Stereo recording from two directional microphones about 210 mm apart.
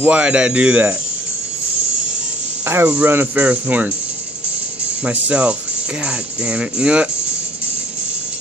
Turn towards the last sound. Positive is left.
turn(degrees=-5)  # may be behind; listen again after turning